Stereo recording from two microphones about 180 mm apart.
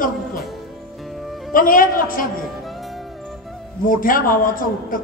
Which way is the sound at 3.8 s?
50° left (ahead or behind).